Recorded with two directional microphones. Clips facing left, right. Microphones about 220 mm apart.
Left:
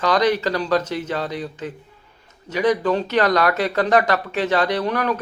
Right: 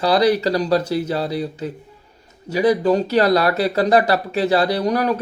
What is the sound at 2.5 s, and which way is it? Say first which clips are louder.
Speech: right 3 dB; 35° right (ahead or behind).